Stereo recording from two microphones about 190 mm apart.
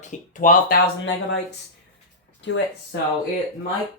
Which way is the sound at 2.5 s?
70° left (ahead or behind).